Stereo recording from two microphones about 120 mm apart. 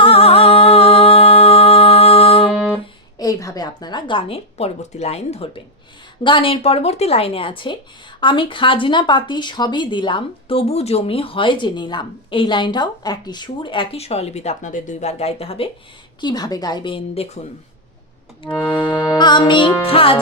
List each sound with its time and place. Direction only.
0.0 s music: 55° left (ahead or behind)
3.2 s speech: 30° left (ahead or behind); by 5.6 s 60° left (ahead or behind)
6.2 s speech: 45° left (ahead or behind)
16.2 s a woman's voice: 35° left (ahead or behind)
18.7 s a woman's voice: 45° left (ahead or behind)